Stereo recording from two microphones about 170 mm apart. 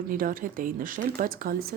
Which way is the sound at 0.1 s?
55° right (ahead or behind).